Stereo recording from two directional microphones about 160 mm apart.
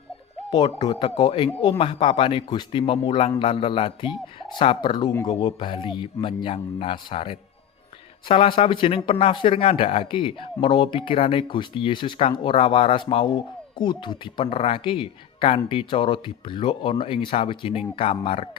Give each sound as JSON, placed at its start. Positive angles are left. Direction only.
{"t": 0.5, "sound": "speech", "side_deg": 30}